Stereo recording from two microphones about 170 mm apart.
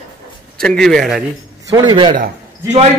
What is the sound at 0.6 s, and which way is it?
Speech, 5° left (ahead or behind).